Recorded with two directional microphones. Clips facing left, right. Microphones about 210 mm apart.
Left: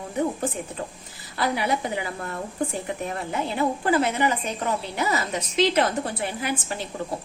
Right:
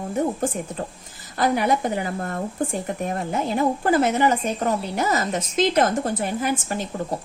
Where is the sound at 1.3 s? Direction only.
45° right (ahead or behind).